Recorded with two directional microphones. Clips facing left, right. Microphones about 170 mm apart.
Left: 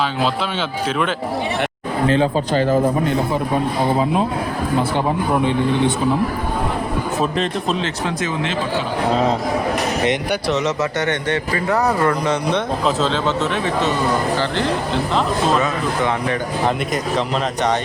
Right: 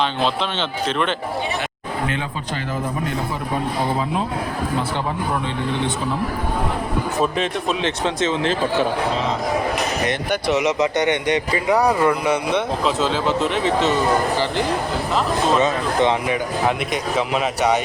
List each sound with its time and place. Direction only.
0.9 s speech: 5° left (ahead or behind)
2.0 s speech: 35° left (ahead or behind)
7.2 s speech: centre (ahead or behind)
7.8 s speech: 20° right (ahead or behind)
10.5 s speech: 10° right (ahead or behind)
15.6 s speech: 25° right (ahead or behind)
16.2 s speech: 10° right (ahead or behind)